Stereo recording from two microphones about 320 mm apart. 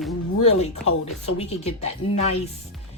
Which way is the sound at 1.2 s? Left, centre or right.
Centre.